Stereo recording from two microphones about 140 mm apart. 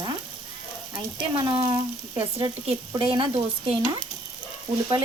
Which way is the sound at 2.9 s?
35° right (ahead or behind).